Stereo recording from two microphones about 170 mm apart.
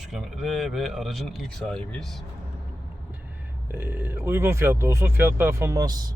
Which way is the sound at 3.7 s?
10° right (ahead or behind).